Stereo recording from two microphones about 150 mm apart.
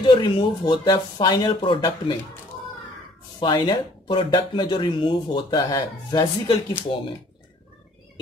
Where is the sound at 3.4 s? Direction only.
30° left (ahead or behind).